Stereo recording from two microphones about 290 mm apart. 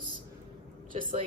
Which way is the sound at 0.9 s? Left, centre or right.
Right.